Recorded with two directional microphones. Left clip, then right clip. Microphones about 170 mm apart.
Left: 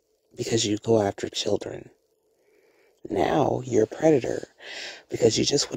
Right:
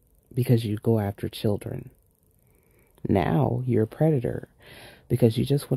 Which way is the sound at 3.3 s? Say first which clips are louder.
Left 3 dB; 50° left (ahead or behind).